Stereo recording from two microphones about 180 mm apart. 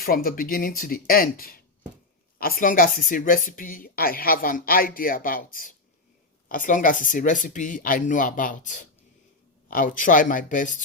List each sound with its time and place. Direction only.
0.0 s speech: 55° left (ahead or behind)